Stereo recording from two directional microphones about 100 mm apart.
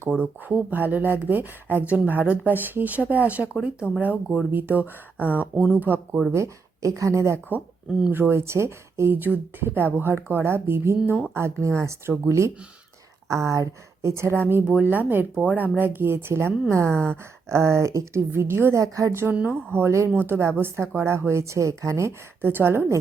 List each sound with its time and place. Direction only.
0.2 s speech: 20° right (ahead or behind)
19.3 s speech: 15° right (ahead or behind)
19.7 s speech: 25° right (ahead or behind)